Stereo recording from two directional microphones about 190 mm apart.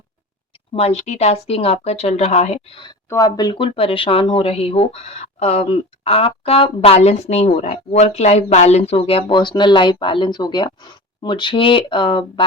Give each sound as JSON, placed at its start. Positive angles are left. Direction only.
{"t": 0.7, "sound": "speech", "side_deg": 30}